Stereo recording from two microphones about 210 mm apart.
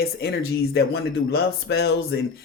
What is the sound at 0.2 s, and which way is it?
Speech, 50° left (ahead or behind).